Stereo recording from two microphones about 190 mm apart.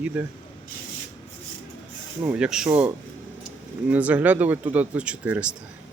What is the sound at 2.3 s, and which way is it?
Speech, 5° right (ahead or behind).